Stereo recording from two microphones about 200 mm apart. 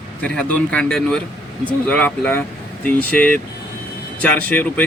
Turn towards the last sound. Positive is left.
turn(degrees=5)  # may be behind; listen again after turning